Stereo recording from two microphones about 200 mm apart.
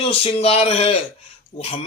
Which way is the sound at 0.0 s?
30° left (ahead or behind).